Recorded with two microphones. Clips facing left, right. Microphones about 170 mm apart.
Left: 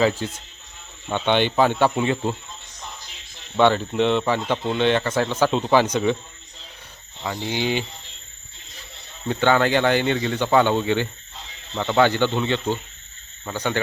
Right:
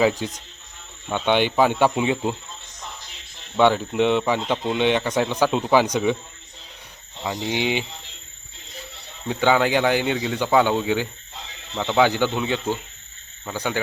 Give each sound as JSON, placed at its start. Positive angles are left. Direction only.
{"t": 0.0, "sound": "speech", "side_deg": -15}
{"t": 3.6, "sound": "speech", "side_deg": -10}
{"t": 7.3, "sound": "speech", "side_deg": -20}
{"t": 9.3, "sound": "speech", "side_deg": -10}